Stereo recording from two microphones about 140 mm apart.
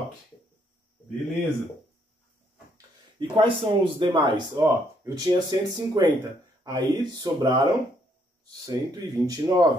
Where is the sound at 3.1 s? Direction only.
35° right (ahead or behind).